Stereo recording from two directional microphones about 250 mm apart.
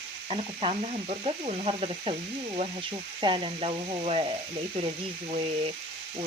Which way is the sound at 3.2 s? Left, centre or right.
Centre.